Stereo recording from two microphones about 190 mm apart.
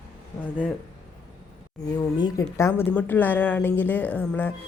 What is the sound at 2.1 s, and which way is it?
A woman's voice, 20° left (ahead or behind).